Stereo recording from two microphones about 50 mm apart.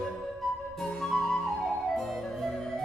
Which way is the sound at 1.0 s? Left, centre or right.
Centre.